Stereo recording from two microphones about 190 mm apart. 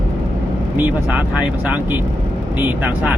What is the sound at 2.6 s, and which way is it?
Speech, 10° right (ahead or behind).